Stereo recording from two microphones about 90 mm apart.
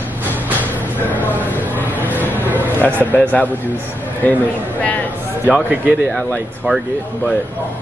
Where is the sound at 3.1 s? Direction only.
15° left (ahead or behind).